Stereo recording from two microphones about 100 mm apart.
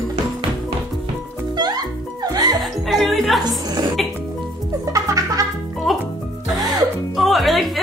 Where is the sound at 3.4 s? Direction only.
45° right (ahead or behind).